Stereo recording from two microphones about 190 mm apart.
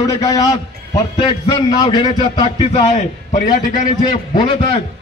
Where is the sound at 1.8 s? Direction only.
20° left (ahead or behind).